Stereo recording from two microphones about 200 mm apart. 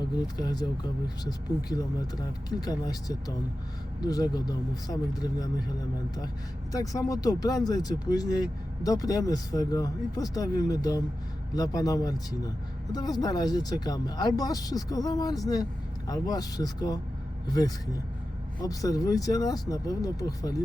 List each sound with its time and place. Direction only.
0.3 s speech: 20° left (ahead or behind)
2.5 s speech: 20° left (ahead or behind)
6.7 s speech: 15° left (ahead or behind)